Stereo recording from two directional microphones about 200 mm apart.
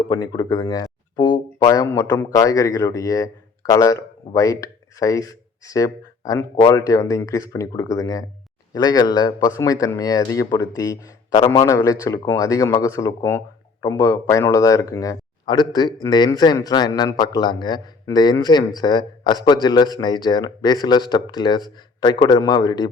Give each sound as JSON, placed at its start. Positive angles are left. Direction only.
{"t": 0.1, "sound": "speech", "side_deg": 20}